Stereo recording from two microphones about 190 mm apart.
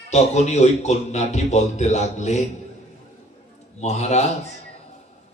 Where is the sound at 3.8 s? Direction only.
35° left (ahead or behind).